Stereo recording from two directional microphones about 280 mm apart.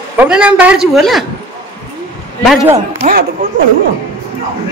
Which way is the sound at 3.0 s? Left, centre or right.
Right.